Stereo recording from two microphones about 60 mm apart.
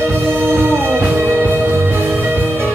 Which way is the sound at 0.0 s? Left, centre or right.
Right.